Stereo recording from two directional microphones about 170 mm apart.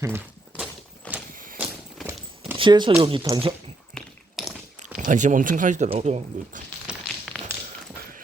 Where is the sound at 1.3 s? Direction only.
55° right (ahead or behind).